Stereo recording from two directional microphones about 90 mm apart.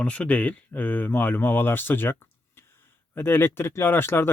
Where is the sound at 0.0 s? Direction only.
15° left (ahead or behind).